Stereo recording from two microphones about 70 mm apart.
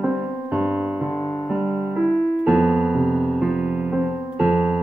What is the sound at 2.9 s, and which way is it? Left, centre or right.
Music, centre.